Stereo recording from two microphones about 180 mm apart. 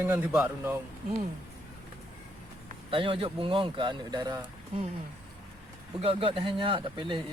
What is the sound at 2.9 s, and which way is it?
Speech, 30° right (ahead or behind).